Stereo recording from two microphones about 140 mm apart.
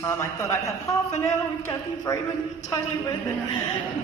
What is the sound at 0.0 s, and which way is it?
A man's voice, 20° left (ahead or behind).